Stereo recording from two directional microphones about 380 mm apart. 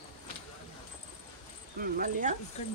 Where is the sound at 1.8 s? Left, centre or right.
Right.